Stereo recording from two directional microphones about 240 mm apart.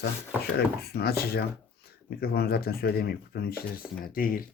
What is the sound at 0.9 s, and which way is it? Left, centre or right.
Speech, left.